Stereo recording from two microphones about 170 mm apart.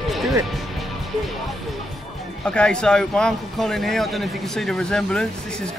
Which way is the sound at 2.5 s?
5° left (ahead or behind).